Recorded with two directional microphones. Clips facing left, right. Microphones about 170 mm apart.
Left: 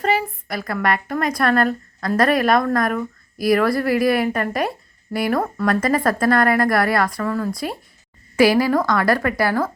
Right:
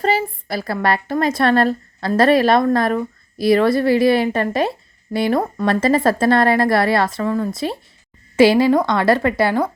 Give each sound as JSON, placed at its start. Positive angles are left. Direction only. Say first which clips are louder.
{"t": 0.0, "sound": "a woman's voice", "louder": "right 2 dB", "side_deg": -30}